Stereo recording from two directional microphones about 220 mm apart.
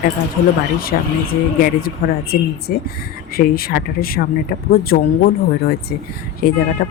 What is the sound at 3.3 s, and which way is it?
Speech, 45° left (ahead or behind).